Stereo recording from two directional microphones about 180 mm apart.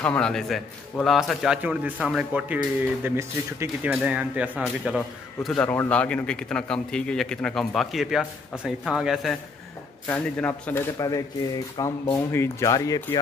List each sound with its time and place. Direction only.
0.0 s speech: 5° left (ahead or behind)
11.0 s speech: 20° left (ahead or behind)